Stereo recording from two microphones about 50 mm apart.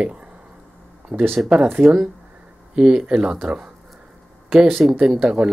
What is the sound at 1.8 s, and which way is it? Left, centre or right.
Speech, centre.